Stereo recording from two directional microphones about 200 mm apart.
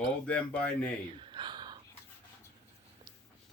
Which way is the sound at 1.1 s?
25° right (ahead or behind).